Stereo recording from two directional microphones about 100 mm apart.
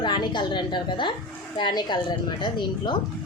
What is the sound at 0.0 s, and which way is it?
A woman's voice, 50° left (ahead or behind).